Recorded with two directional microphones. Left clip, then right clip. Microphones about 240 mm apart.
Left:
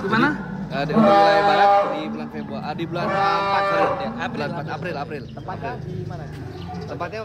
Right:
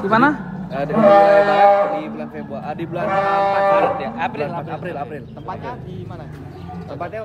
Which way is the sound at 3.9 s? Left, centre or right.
Right.